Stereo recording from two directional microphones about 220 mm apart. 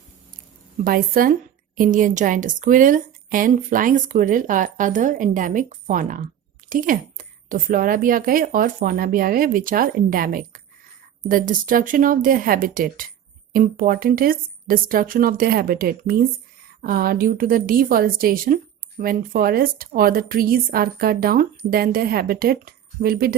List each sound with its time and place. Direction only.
0.9 s a woman's voice: 40° right (ahead or behind)